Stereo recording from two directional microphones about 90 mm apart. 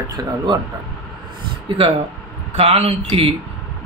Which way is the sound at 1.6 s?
90° right.